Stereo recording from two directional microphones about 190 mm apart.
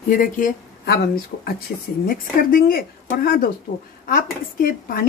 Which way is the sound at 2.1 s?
50° left (ahead or behind).